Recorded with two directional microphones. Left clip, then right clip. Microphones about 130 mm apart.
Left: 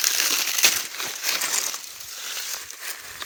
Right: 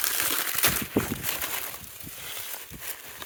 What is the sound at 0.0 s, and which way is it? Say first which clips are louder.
Crumpling: left 6 dB; 30° right (ahead or behind).